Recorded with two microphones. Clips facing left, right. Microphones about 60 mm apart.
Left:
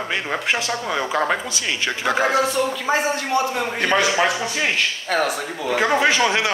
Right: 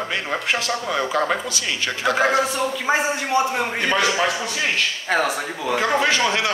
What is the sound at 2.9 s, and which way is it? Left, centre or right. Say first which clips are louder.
Speech: even; right.